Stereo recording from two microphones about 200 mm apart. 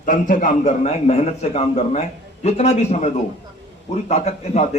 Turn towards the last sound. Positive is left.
turn(degrees=35)  # may be behind; listen again after turning